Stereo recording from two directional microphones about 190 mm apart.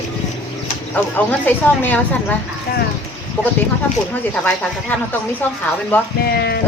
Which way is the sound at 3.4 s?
10° left (ahead or behind).